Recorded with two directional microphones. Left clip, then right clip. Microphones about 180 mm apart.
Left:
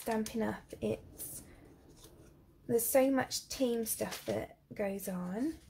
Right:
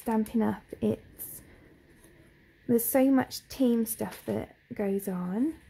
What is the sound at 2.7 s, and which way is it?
A woman's voice, 40° right (ahead or behind).